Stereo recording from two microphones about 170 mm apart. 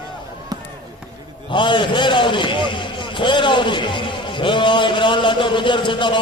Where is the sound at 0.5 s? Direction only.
20° right (ahead or behind).